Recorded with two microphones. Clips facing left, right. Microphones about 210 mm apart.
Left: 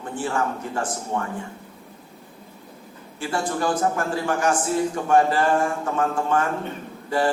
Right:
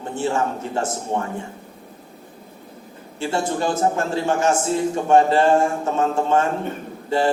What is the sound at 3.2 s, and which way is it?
A man's voice, 25° right (ahead or behind).